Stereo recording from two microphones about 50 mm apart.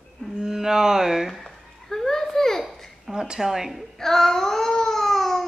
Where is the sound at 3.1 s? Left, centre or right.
Centre.